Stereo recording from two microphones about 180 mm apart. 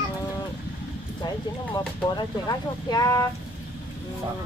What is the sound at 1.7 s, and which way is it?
Speech, 20° left (ahead or behind).